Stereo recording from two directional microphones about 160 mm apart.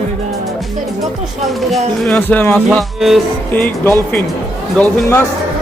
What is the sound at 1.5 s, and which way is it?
Speech, centre (ahead or behind).